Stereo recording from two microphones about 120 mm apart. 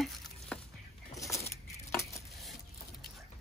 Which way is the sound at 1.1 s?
25° left (ahead or behind).